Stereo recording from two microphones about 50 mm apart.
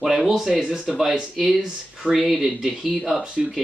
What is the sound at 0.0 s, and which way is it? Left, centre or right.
Speech, centre.